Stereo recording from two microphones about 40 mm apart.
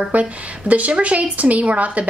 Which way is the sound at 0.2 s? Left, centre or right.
Right.